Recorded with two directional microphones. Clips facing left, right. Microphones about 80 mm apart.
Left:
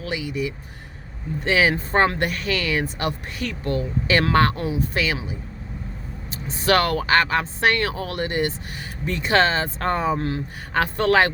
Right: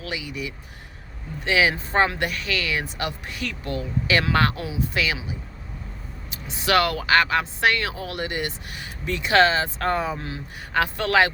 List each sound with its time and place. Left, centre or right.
0.0 s speech: left
6.3 s speech: left
10.8 s speech: left